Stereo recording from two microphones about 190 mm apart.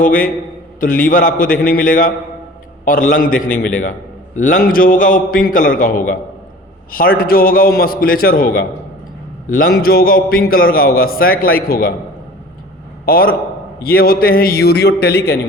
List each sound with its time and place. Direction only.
0.0 s a man's voice: 45° left (ahead or behind)
13.1 s a man's voice: 50° left (ahead or behind)